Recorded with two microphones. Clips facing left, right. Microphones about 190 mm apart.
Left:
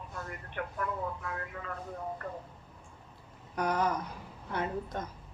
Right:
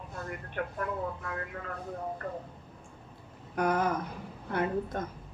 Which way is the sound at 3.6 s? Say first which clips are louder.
Right 2 dB; 50° right (ahead or behind).